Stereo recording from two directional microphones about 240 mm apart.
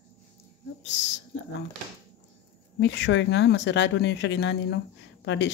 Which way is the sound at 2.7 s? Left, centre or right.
Left.